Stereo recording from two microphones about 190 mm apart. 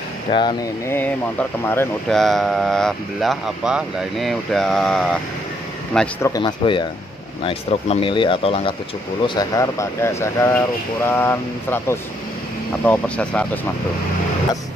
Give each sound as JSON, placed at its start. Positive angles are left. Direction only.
{"t": 0.3, "sound": "speech", "side_deg": 25}
{"t": 6.2, "sound": "speech", "side_deg": 20}